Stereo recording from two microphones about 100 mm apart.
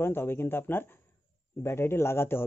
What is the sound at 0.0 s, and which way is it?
A man's voice, 25° left (ahead or behind).